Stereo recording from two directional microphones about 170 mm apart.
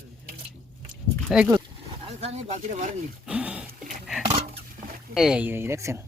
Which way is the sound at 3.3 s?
10° right (ahead or behind).